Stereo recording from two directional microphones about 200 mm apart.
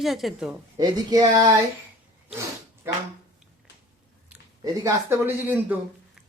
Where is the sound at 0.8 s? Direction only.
20° right (ahead or behind).